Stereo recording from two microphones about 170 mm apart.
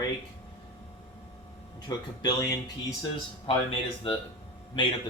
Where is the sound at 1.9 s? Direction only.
20° left (ahead or behind).